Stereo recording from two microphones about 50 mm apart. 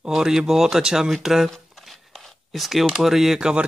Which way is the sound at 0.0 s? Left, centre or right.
Centre.